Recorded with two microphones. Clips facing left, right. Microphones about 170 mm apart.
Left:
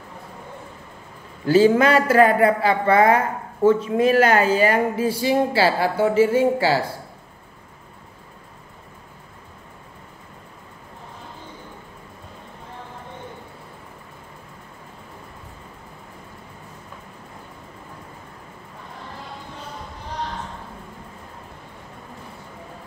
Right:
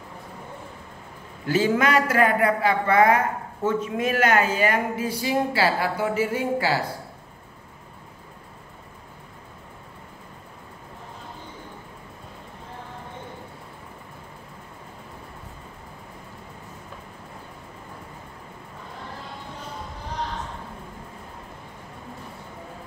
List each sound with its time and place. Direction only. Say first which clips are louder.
1.4 s speech: left 6 dB; 30° left (ahead or behind)